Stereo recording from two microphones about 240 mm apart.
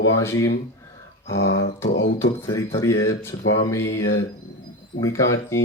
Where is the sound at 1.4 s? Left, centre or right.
Left.